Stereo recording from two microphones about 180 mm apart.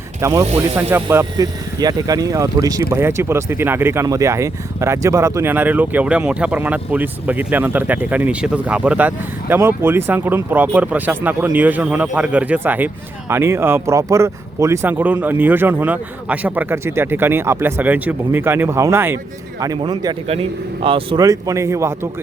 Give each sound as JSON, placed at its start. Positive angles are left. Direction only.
{"t": 0.2, "sound": "ratchet", "side_deg": -15}
{"t": 0.8, "sound": "speech", "side_deg": -10}